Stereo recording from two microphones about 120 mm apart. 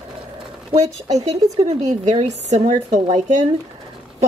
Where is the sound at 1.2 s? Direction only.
65° right (ahead or behind); by 3.4 s 80° right.